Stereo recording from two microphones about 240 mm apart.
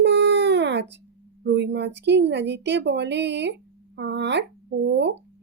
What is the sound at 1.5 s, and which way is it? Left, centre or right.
A woman's voice, right.